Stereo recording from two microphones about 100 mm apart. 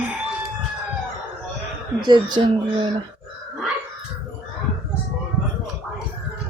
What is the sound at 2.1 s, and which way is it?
Speech, 55° right (ahead or behind).